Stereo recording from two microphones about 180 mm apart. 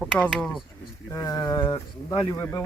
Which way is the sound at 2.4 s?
15° left (ahead or behind).